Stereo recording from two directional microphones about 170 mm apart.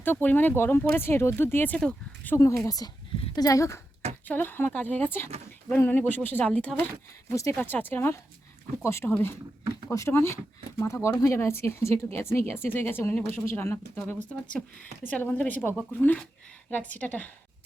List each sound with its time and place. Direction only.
0.0 s speech: 10° left (ahead or behind)